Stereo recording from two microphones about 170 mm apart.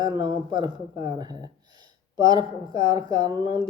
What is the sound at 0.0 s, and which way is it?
Speech, 25° right (ahead or behind).